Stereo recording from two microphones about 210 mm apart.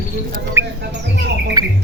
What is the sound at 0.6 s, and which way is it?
Mouse, 10° right (ahead or behind).